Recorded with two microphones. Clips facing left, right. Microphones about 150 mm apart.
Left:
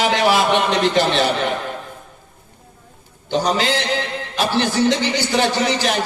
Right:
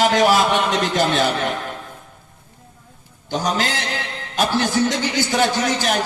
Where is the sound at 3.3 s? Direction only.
45° right (ahead or behind).